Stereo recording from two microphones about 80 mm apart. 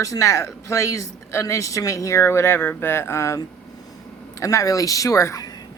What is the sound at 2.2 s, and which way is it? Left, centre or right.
A woman's voice, left.